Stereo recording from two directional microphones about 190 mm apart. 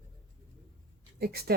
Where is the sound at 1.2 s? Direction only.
55° right (ahead or behind).